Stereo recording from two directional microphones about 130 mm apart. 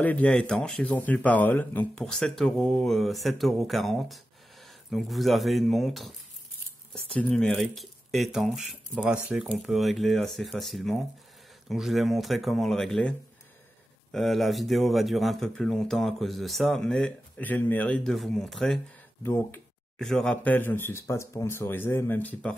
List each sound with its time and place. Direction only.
0.0 s speech: 10° left (ahead or behind)
7.2 s speech: 10° left (ahead or behind)
14.1 s speech: centre (ahead or behind)
19.2 s speech: 20° left (ahead or behind)
20.0 s speech: 5° left (ahead or behind)